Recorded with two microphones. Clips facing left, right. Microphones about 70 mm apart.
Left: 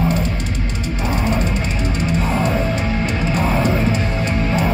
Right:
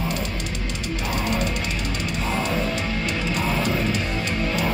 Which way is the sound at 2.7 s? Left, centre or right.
Left.